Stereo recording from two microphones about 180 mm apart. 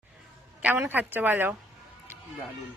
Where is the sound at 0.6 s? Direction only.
10° right (ahead or behind).